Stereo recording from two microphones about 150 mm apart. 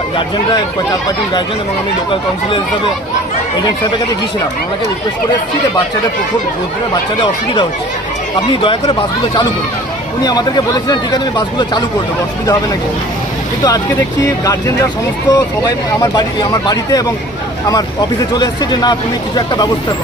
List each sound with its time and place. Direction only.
8.6 s speech: 35° left (ahead or behind)
10.8 s speech: 25° left (ahead or behind)
14.3 s speech: 25° left (ahead or behind)
18.3 s speech: 25° left (ahead or behind)